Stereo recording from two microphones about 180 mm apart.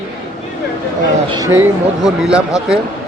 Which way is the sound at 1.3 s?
15° right (ahead or behind).